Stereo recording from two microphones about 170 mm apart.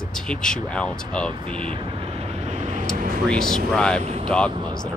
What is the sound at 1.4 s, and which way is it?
Vehicle, 30° right (ahead or behind).